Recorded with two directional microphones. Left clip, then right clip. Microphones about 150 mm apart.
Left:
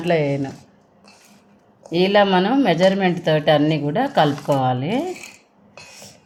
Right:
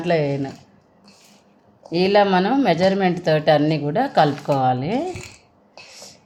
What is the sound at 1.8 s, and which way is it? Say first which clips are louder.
Speech: even; 5° left (ahead or behind).